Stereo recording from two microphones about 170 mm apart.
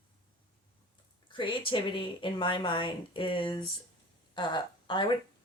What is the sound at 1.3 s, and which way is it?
Speech, 30° left (ahead or behind).